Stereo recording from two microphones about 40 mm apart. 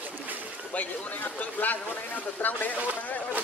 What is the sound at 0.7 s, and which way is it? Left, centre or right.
Speech, left.